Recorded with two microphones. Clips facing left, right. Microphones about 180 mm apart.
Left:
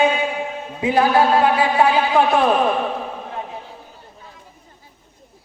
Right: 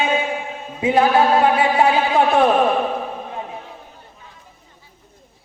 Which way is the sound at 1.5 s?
25° right (ahead or behind).